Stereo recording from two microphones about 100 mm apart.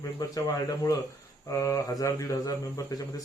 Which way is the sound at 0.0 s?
35° left (ahead or behind).